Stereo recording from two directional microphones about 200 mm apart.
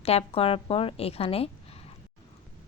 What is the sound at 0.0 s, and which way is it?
A woman's voice, 30° left (ahead or behind).